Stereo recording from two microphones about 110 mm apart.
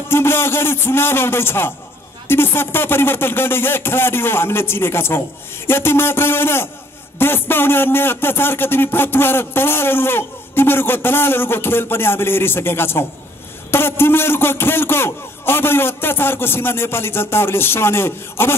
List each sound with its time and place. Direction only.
0.1 s a man's voice: 20° left (ahead or behind)